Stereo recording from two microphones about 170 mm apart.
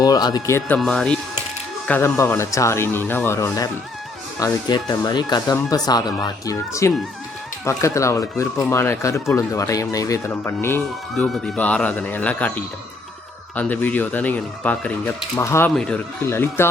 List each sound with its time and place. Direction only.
0.0 s speech: 25° left (ahead or behind)
0.8 s speech: 5° left (ahead or behind)
4.7 s speech: 25° left (ahead or behind)
11.1 s speech: centre (ahead or behind)
15.7 s speech: 5° left (ahead or behind)
16.2 s speech: 15° left (ahead or behind)